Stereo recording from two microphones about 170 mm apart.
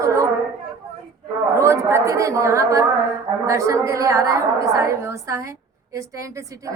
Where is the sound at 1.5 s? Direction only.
15° right (ahead or behind).